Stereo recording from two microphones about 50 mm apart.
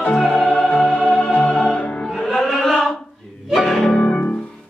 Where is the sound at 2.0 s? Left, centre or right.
Centre.